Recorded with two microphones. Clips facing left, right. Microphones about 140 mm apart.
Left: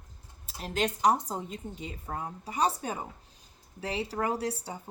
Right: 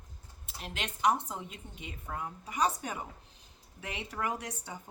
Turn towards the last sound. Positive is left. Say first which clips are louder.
# left 6 dB
turn(degrees=30)  # may be behind; listen again after turning